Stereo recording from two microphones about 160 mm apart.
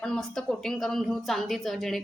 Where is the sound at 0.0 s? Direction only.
5° left (ahead or behind).